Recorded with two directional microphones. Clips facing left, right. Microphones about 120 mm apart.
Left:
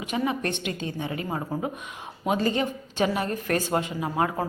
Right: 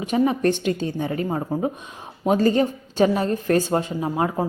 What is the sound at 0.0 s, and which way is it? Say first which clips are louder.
A woman's voice: right 7 dB; 35° right (ahead or behind).